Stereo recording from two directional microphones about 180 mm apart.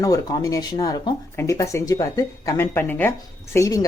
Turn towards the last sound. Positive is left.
turn(degrees=15)  # may be behind; listen again after turning